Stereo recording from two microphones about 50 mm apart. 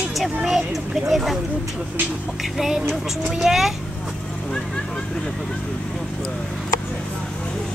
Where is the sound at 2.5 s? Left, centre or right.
Centre.